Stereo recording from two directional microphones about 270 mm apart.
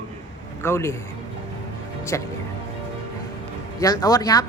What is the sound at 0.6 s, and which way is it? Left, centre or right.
Speech, centre.